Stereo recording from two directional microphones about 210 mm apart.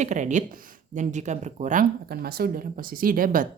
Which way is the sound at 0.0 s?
35° right (ahead or behind).